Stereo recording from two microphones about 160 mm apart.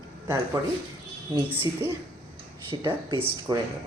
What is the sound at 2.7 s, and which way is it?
Speech, 30° right (ahead or behind).